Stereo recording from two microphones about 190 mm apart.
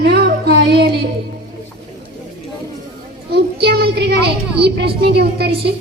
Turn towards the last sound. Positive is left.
turn(degrees=-60)  # may be behind; listen again after turning